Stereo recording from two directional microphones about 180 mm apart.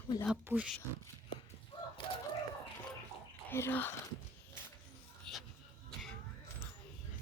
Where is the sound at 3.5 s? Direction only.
10° left (ahead or behind).